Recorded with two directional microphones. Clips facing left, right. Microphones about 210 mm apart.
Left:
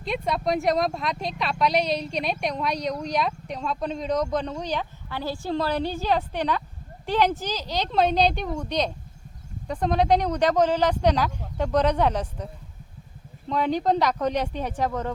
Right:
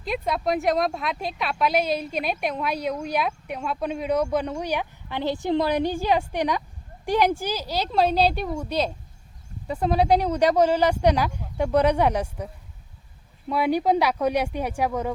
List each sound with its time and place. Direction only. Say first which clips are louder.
0.0 s speech: even; centre (ahead or behind)
13.5 s speech: right 2 dB; 10° right (ahead or behind)